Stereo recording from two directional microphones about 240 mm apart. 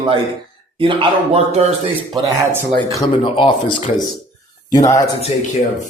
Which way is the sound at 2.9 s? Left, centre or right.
Left.